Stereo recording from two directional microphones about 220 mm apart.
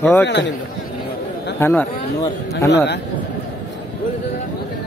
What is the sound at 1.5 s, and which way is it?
Speech, 10° left (ahead or behind).